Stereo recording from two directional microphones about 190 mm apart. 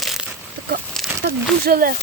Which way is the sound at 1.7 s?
50° right (ahead or behind).